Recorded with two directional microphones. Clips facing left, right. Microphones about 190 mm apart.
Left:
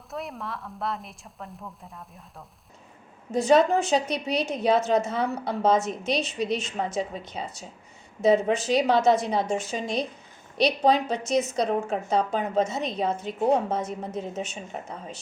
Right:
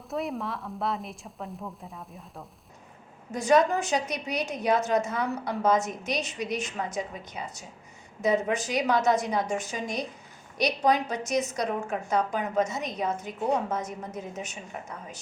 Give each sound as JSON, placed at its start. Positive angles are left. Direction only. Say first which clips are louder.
{"t": 0.1, "sound": "speech", "louder": "right 3 dB", "side_deg": 0}
{"t": 3.3, "sound": "a woman's voice", "louder": "left 3 dB", "side_deg": 25}